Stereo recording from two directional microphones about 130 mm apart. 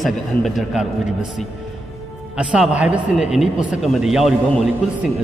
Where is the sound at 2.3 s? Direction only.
5° right (ahead or behind).